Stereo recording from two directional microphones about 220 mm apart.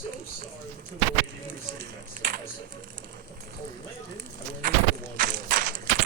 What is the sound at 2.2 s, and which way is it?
Typing, 35° right (ahead or behind).